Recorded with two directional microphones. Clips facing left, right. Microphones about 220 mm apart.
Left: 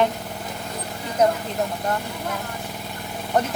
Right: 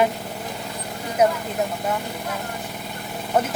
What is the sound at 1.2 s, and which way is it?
Speech, 10° right (ahead or behind).